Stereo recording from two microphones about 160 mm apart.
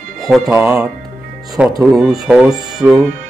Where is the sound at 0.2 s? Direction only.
Centre (ahead or behind).